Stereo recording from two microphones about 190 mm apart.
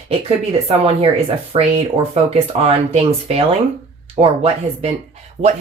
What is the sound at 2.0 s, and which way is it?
Speech, 30° right (ahead or behind).